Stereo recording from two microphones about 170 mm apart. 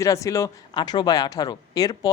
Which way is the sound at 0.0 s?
20° left (ahead or behind).